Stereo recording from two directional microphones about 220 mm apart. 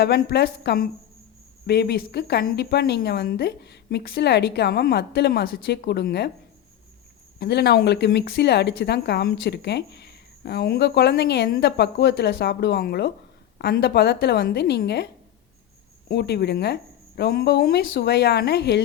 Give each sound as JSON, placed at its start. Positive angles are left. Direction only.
{"t": 0.0, "sound": "speech", "side_deg": 50}
{"t": 7.3, "sound": "speech", "side_deg": 50}
{"t": 16.0, "sound": "speech", "side_deg": 50}